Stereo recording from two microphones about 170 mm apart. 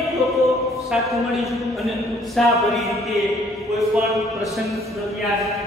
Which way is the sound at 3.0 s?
Centre (ahead or behind).